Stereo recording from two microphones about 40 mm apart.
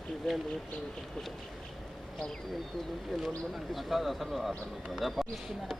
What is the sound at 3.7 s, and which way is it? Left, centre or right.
A man's voice, centre.